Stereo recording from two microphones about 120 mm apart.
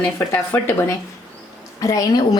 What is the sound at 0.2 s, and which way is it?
Speech, 20° left (ahead or behind).